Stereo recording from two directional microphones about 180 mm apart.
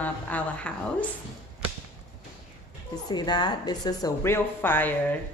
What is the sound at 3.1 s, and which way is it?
A woman's voice, 25° left (ahead or behind).